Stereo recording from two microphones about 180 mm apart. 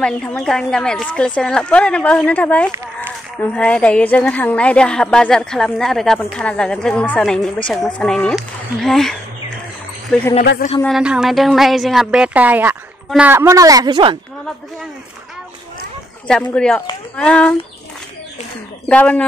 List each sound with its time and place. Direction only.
0.0 s a woman's voice: 5° left (ahead or behind)
10.8 s a woman's voice: centre (ahead or behind); by 14.1 s 25° right (ahead or behind)
16.5 s a woman's voice: 5° left (ahead or behind)
18.9 s speech: 5° left (ahead or behind)